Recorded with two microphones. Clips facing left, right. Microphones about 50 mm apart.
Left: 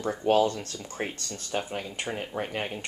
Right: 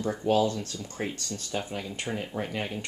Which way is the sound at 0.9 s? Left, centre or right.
Left.